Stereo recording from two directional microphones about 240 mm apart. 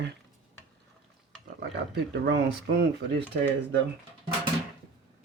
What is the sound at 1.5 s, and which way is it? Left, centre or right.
Speech, right.